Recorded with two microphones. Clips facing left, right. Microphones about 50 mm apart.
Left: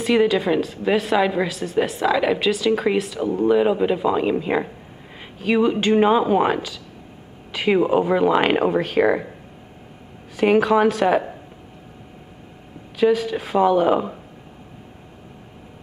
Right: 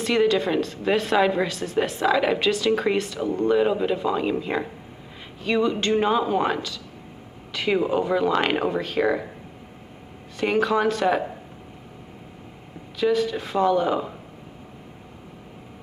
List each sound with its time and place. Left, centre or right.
0.0 s a woman's voice: centre
10.4 s speech: centre
12.9 s speech: centre